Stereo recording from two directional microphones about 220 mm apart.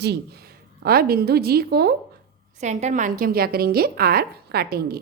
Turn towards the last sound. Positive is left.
turn(degrees=-45)  # may be behind; listen again after turning